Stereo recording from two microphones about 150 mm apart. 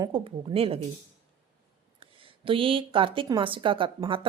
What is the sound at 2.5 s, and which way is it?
A woman's voice, 35° right (ahead or behind).